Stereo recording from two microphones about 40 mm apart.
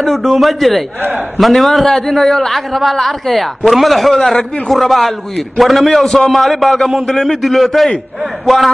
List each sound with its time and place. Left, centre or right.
0.0 s a man's voice: centre